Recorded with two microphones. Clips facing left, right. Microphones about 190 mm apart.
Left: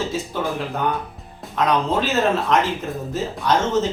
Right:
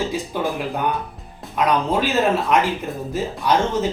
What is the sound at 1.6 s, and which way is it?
Speech, 10° right (ahead or behind).